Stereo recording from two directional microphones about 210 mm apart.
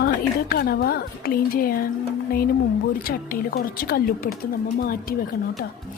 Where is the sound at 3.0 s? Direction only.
45° left (ahead or behind).